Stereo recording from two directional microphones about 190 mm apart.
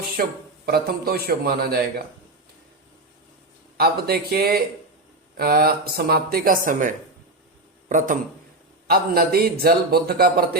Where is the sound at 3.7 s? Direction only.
55° right (ahead or behind).